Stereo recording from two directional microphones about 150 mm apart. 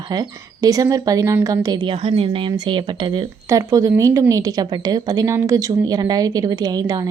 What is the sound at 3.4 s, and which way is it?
A woman's voice, 20° right (ahead or behind).